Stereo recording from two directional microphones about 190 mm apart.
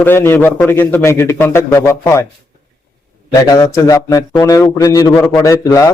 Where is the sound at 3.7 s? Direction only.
15° left (ahead or behind).